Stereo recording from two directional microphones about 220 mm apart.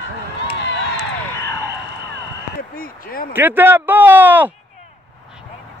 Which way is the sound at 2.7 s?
40° left (ahead or behind).